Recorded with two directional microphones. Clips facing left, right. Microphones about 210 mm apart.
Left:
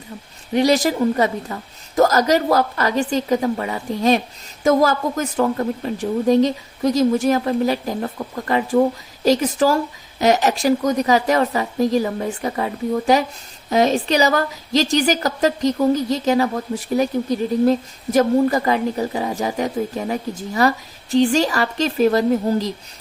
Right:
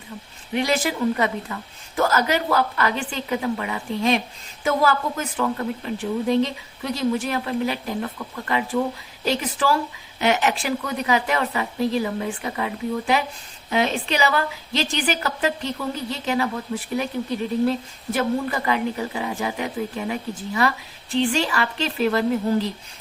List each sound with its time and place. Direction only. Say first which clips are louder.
0.5 s a woman's voice: left 6 dB; 40° left (ahead or behind)